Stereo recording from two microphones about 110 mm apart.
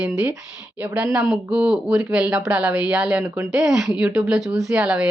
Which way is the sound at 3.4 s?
25° right (ahead or behind).